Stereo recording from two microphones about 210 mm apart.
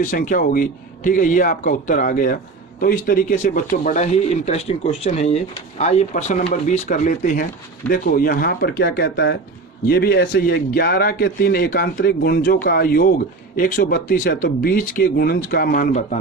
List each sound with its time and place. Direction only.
0.0 s speech: 40° left (ahead or behind)